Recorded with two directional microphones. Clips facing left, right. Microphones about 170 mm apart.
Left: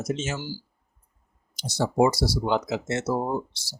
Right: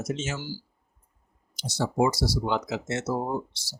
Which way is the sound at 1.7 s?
35° left (ahead or behind).